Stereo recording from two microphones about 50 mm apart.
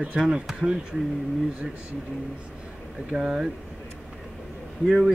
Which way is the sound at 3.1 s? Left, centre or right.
Centre.